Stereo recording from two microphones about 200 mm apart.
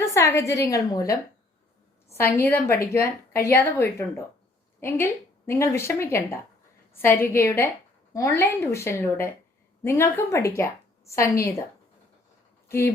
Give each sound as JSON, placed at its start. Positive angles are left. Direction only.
{"t": 0.0, "sound": "a woman's voice", "side_deg": 15}
{"t": 2.3, "sound": "a woman's voice", "side_deg": 10}
{"t": 12.6, "sound": "speech", "side_deg": 15}